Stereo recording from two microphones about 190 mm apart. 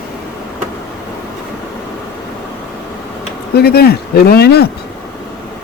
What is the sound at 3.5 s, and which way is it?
Speech, 55° left (ahead or behind).